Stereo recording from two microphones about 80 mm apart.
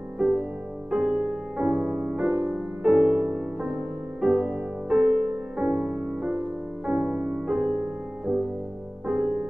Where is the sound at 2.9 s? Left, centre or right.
Centre.